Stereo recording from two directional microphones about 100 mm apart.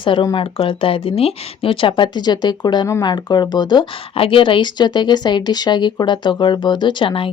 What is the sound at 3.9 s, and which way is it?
Speech, 65° left (ahead or behind).